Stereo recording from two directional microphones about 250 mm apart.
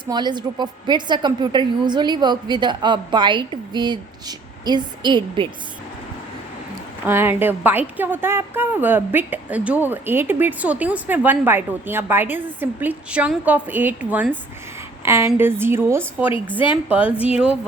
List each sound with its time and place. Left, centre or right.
0.0 s a woman's voice: centre
7.0 s a woman's voice: centre